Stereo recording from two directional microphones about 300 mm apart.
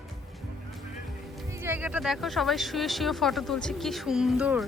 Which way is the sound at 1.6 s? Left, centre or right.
Centre.